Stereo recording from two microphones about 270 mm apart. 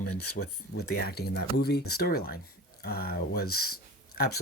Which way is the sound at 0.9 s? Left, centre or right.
Left.